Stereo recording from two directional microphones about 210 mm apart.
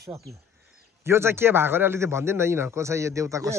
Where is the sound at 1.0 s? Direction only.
10° right (ahead or behind).